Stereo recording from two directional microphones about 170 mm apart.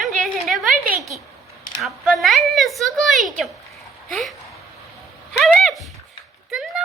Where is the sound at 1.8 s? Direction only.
Centre (ahead or behind).